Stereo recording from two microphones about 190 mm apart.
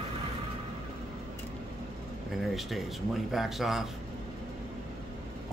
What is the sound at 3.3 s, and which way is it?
Speech, centre (ahead or behind).